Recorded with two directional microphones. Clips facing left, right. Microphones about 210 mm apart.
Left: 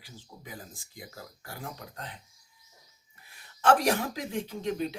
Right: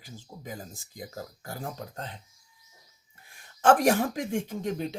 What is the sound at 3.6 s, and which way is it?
Speech, 50° right (ahead or behind).